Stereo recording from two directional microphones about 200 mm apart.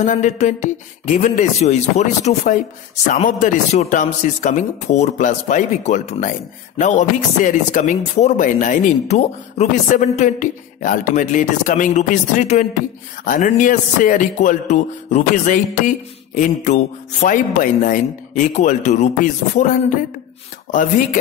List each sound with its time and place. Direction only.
0.0 s speech: 40° left (ahead or behind)